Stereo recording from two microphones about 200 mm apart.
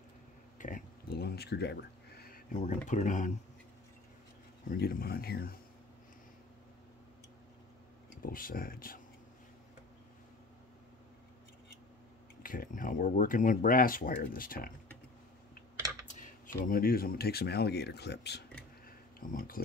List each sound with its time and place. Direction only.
0.6 s a sound: 40° left (ahead or behind)
4.6 s speech: 45° left (ahead or behind)
8.1 s speech: 45° left (ahead or behind)
12.4 s speech: 45° left (ahead or behind)
16.1 s speech: 40° left (ahead or behind); by 18.4 s 55° left (ahead or behind)
18.9 s a sound: 45° left (ahead or behind)